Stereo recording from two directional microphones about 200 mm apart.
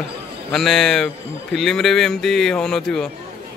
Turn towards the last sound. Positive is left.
turn(degrees=5)  # may be behind; listen again after turning